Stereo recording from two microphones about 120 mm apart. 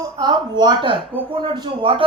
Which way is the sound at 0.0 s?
35° right (ahead or behind).